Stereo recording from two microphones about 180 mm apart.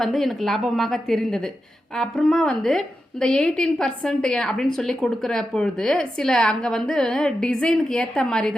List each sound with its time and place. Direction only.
0.0 s a woman's voice: centre (ahead or behind)